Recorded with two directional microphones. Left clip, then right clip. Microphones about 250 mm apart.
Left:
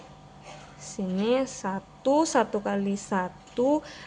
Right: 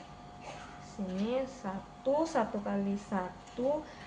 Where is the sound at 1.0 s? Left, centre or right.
Left.